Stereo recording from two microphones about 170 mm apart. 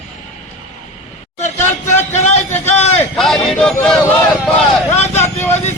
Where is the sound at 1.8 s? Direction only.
45° left (ahead or behind).